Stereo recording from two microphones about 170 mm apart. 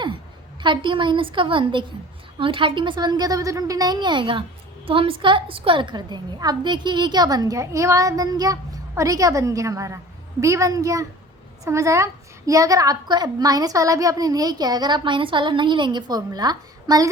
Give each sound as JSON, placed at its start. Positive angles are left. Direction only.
{"t": 0.6, "sound": "a woman's voice", "side_deg": -25}